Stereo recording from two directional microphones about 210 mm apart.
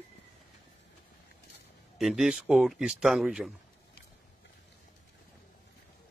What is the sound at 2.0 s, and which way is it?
Speech, centre (ahead or behind).